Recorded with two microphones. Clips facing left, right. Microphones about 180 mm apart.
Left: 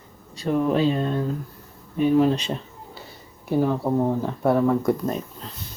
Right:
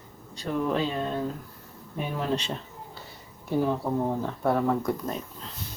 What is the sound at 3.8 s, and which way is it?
Speech, 20° left (ahead or behind).